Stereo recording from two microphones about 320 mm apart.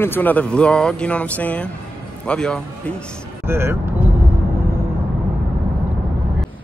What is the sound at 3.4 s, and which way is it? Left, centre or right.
Speech, centre.